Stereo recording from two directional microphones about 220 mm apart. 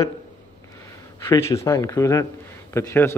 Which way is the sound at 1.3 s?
10° left (ahead or behind).